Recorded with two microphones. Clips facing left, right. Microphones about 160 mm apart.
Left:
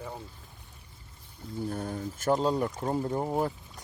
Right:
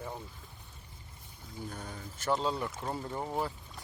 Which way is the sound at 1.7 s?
50° left (ahead or behind).